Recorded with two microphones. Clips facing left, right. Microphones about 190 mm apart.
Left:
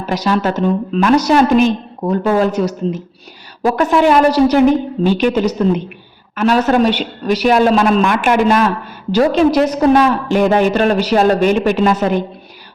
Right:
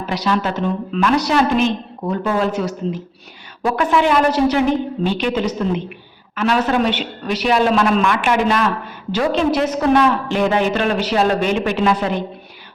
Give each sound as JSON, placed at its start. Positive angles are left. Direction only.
{"t": 0.0, "sound": "a woman's voice", "side_deg": 45}